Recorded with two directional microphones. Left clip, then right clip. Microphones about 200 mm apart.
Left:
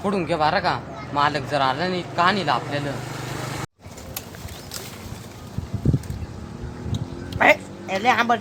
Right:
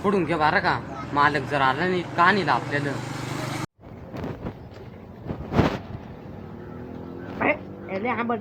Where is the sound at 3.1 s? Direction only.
50° left (ahead or behind).